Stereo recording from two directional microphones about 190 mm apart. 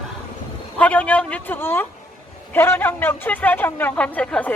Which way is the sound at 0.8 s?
5° left (ahead or behind).